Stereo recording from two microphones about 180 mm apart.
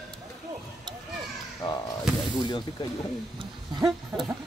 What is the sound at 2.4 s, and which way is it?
Speech, 25° left (ahead or behind).